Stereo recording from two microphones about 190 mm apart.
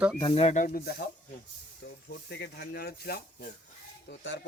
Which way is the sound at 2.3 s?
60° left (ahead or behind).